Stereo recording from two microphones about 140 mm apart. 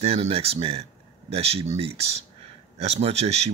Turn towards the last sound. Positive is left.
turn(degrees=-50)  # may be behind; listen again after turning